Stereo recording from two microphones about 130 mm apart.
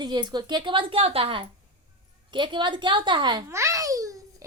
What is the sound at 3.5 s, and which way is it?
Babbling, 20° right (ahead or behind).